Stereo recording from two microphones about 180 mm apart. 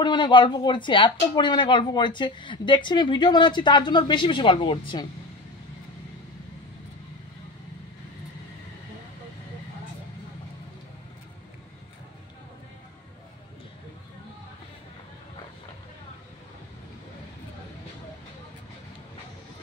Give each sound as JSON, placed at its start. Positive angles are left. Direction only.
{"t": 0.0, "sound": "speech", "side_deg": 25}